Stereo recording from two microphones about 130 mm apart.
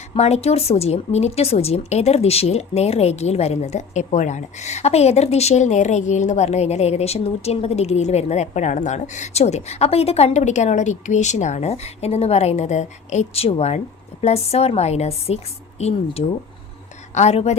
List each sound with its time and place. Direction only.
0.1 s speech: 55° left (ahead or behind)